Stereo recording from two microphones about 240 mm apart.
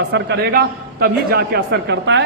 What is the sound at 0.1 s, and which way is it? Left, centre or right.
A man's voice, right.